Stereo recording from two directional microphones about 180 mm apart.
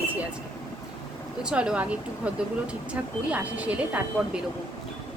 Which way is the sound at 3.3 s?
5° right (ahead or behind).